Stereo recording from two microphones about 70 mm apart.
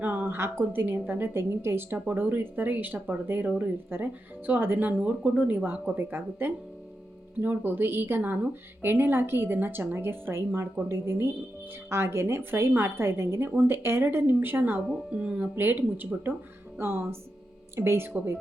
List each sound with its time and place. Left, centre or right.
0.0 s a woman's voice: right
15.1 s speech: centre
15.5 s a woman's voice: right